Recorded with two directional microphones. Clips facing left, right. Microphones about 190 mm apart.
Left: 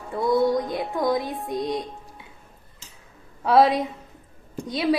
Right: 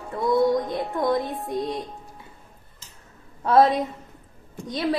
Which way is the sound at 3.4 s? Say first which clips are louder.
Even; 5° left (ahead or behind).